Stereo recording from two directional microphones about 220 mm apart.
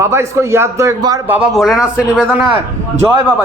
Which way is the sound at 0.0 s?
10° right (ahead or behind).